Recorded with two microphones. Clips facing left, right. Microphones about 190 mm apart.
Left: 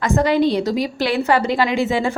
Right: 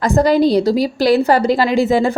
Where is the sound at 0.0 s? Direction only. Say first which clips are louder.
Right 4 dB; 35° right (ahead or behind).